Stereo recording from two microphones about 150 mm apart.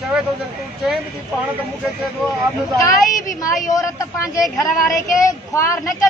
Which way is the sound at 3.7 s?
20° left (ahead or behind).